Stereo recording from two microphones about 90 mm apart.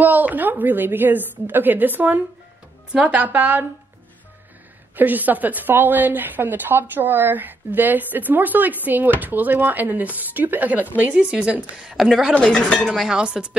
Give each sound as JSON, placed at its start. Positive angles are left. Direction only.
{"t": 0.0, "sound": "a woman's voice", "side_deg": -20}
{"t": 4.9, "sound": "a woman's voice", "side_deg": -20}
{"t": 13.2, "sound": "a woman's voice", "side_deg": -10}